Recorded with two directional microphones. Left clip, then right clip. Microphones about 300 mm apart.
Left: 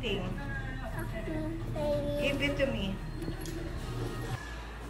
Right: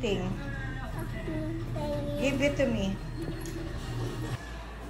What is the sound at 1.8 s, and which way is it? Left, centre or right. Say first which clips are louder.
A woman's voice: left 1 dB; centre.